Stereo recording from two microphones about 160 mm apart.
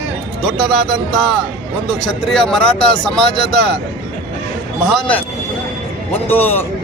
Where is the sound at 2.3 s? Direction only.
5° left (ahead or behind).